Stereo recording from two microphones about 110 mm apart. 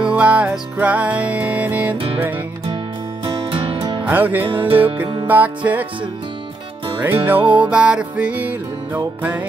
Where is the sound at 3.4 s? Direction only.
55° right (ahead or behind).